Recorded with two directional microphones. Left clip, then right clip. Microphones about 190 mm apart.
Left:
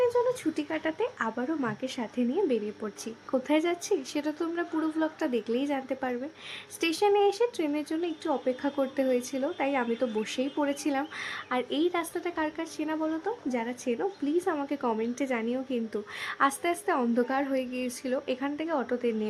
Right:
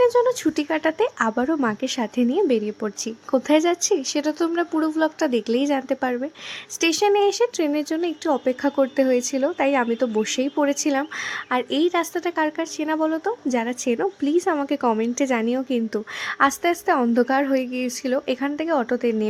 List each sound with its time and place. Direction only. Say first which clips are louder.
0.0 s a woman's voice: right 8 dB; 50° right (ahead or behind); by 19.3 s 35° right (ahead or behind)